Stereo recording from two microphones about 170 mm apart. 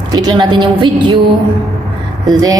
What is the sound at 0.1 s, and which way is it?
A woman's voice, 25° right (ahead or behind).